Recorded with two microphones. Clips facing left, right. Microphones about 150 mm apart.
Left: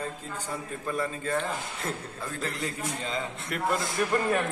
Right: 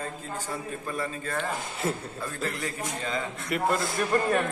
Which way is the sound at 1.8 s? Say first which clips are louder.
Right 5 dB; 5° right (ahead or behind).